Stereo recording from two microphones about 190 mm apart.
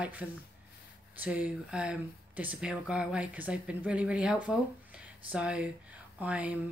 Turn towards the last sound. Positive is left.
turn(degrees=-10)  # may be behind; listen again after turning